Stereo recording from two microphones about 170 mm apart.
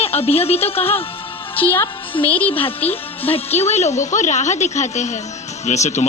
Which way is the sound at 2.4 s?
35° left (ahead or behind).